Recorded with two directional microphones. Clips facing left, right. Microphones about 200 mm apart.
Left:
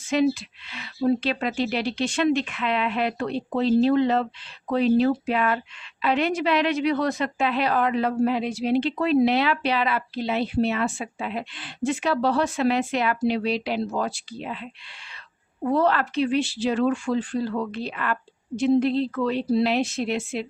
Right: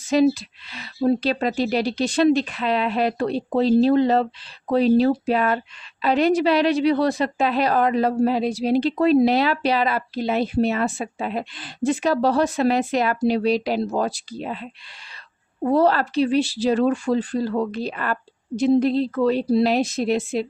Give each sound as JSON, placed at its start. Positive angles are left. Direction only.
{"t": 0.1, "sound": "a woman's voice", "side_deg": -35}